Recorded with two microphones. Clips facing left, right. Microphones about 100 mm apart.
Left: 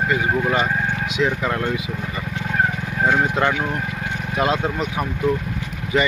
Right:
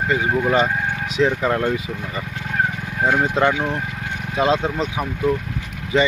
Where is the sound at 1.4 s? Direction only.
25° right (ahead or behind).